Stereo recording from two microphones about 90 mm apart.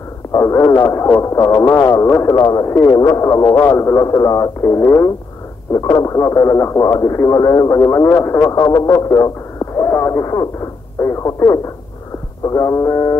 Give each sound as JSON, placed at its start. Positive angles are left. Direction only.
{"t": 0.3, "sound": "speech", "side_deg": 35}
{"t": 2.3, "sound": "speech", "side_deg": 45}
{"t": 5.7, "sound": "speech", "side_deg": 45}
{"t": 11.0, "sound": "speech", "side_deg": 30}